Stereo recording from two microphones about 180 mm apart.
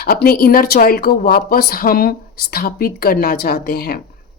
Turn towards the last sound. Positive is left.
turn(degrees=60)  # may be behind; listen again after turning